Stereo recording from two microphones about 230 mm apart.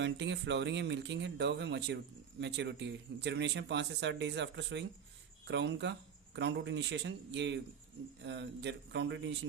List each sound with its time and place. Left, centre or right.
0.0 s speech: right